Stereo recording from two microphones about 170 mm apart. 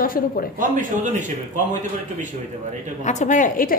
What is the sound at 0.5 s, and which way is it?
Speech, 50° right (ahead or behind).